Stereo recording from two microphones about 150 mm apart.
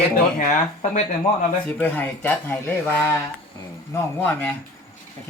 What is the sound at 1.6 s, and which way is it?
Speech, 10° left (ahead or behind).